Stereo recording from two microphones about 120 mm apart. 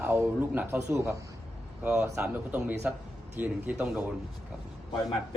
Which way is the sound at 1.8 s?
15° right (ahead or behind).